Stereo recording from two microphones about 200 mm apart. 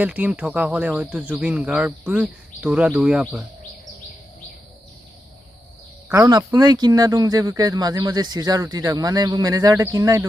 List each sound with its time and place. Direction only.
0.0 s speech: 5° right (ahead or behind)
6.1 s speech: 15° right (ahead or behind)